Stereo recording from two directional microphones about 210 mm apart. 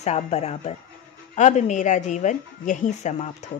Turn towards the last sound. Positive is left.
turn(degrees=35)  # may be behind; listen again after turning